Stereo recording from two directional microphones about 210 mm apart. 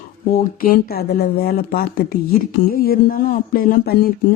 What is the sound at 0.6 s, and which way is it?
Speech, 45° left (ahead or behind).